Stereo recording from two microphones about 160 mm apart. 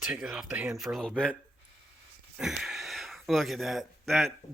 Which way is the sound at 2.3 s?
Centre (ahead or behind).